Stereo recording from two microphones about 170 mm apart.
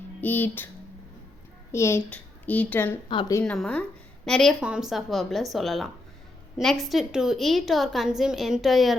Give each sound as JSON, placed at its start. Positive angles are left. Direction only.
{"t": 0.2, "sound": "a child's voice", "side_deg": 10}
{"t": 1.7, "sound": "a child's voice", "side_deg": 15}
{"t": 3.1, "sound": "speech", "side_deg": 30}
{"t": 3.4, "sound": "a child's voice", "side_deg": 5}